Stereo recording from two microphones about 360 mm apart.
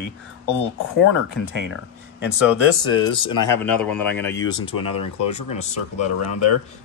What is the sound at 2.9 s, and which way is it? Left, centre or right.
Speech, centre.